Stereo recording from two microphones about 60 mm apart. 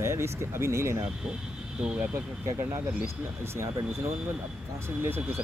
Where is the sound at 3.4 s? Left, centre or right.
Right.